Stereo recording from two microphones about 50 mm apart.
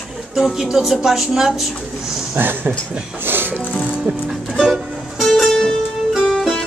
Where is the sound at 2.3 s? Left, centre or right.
Right.